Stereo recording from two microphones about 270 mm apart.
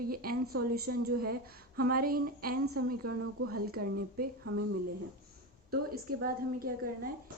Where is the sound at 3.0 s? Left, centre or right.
Right.